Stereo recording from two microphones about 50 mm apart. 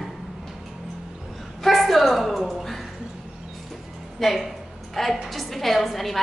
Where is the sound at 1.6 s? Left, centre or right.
Centre.